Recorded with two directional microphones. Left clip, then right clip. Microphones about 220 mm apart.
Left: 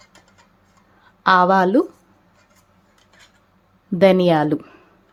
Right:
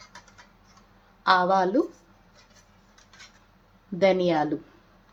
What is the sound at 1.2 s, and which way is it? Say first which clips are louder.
Speech: left 7 dB; 40° left (ahead or behind).